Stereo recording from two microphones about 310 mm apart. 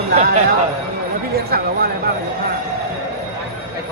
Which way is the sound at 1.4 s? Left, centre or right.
Right.